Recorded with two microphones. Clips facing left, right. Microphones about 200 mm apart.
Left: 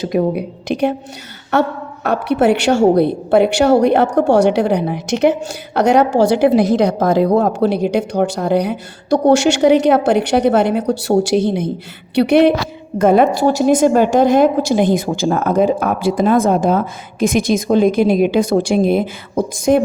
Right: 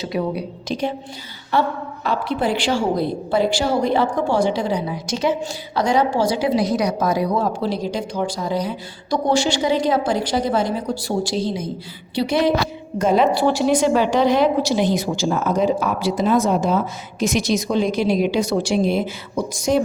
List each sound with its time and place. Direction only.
0.0 s a woman's voice: 50° left (ahead or behind)
2.0 s a woman's voice: 65° left (ahead or behind)
13.0 s a woman's voice: 55° left (ahead or behind)